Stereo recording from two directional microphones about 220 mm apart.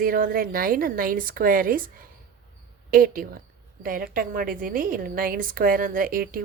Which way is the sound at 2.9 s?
40° right (ahead or behind).